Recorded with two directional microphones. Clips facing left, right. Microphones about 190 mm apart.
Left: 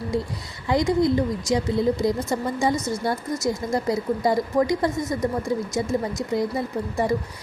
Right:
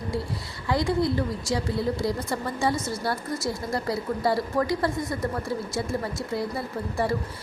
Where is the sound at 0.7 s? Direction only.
20° left (ahead or behind).